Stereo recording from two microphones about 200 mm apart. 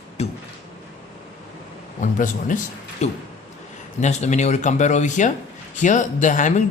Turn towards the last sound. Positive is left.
turn(degrees=40)  # may be behind; listen again after turning